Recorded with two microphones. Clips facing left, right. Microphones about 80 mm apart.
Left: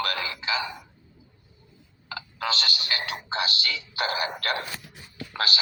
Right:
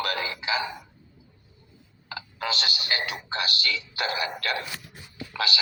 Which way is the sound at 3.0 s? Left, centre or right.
Left.